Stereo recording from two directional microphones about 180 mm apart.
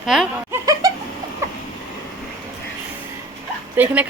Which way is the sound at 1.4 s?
15° right (ahead or behind).